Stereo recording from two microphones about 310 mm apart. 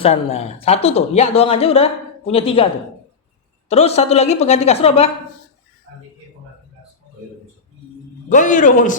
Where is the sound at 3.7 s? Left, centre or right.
Centre.